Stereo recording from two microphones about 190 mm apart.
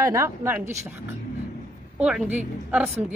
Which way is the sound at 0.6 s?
35° right (ahead or behind).